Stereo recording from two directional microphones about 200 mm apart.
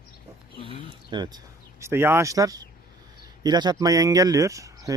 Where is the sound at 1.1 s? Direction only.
20° right (ahead or behind).